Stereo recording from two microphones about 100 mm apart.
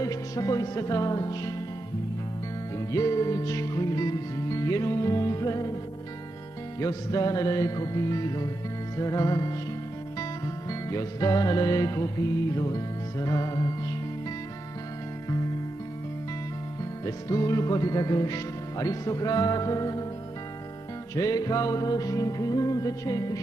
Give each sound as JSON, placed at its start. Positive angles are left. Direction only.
{"t": 0.0, "sound": "music", "side_deg": 35}
{"t": 2.9, "sound": "speech", "side_deg": 35}
{"t": 6.8, "sound": "speech", "side_deg": 35}
{"t": 8.9, "sound": "music", "side_deg": 35}
{"t": 17.0, "sound": "speech", "side_deg": 35}
{"t": 21.1, "sound": "speech", "side_deg": 40}